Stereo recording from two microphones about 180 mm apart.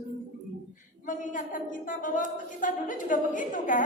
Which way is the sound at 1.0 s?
45° left (ahead or behind).